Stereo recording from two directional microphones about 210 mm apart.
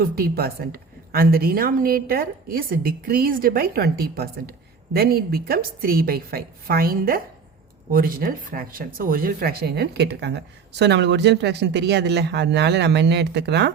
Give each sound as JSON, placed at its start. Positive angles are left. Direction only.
{"t": 0.0, "sound": "speech", "side_deg": -45}